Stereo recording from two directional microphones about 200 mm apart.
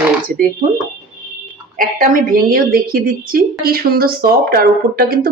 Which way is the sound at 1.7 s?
40° right (ahead or behind).